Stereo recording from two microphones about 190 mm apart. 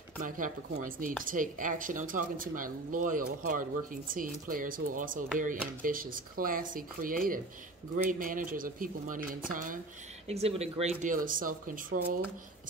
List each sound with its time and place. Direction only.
0.2 s speech: 45° right (ahead or behind)
10.2 s speech: 35° right (ahead or behind); by 12.2 s 50° right (ahead or behind)